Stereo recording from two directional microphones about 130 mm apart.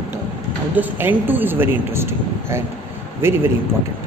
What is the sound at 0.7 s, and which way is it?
Speech, 15° right (ahead or behind).